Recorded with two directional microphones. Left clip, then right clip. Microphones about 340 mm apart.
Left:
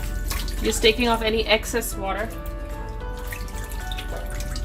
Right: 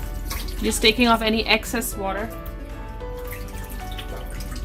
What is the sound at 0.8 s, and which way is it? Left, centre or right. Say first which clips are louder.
Speech: right 2 dB; right.